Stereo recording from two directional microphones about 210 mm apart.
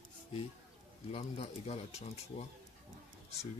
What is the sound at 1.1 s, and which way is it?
Speech, 30° left (ahead or behind).